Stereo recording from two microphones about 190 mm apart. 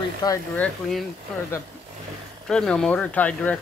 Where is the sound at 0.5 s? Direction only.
5° left (ahead or behind).